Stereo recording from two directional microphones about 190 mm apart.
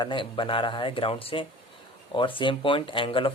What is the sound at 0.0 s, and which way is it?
Speech, 25° left (ahead or behind).